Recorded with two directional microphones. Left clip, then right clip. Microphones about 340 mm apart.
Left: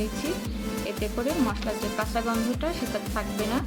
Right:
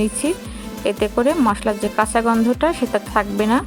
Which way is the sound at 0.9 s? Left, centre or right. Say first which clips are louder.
Right 13 dB; right.